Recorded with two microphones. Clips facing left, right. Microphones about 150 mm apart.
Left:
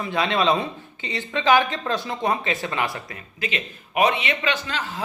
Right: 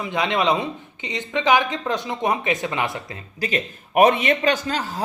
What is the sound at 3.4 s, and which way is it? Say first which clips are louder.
A man's voice: right 4 dB; 40° right (ahead or behind).